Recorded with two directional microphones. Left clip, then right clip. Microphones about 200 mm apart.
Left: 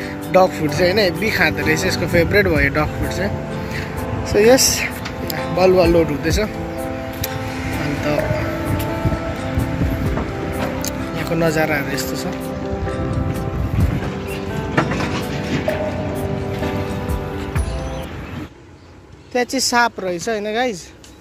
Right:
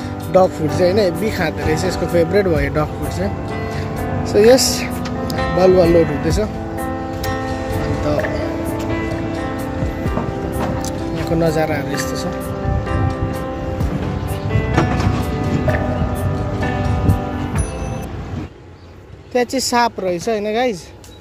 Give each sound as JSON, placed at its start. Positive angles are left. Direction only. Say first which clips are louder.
{"t": 0.3, "sound": "speech", "louder": "right 1 dB", "side_deg": -5}
{"t": 4.3, "sound": "speech", "louder": "right 1 dB", "side_deg": -5}
{"t": 11.1, "sound": "speech", "louder": "right 1 dB", "side_deg": 0}
{"t": 19.3, "sound": "speech", "louder": "right 1 dB", "side_deg": 0}